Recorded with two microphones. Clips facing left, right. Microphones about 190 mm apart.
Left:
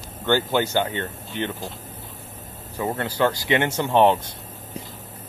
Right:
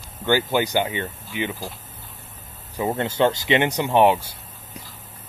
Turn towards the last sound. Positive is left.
turn(degrees=-10)  # may be behind; listen again after turning